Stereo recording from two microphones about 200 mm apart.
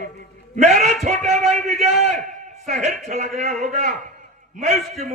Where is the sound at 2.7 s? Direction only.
35° right (ahead or behind).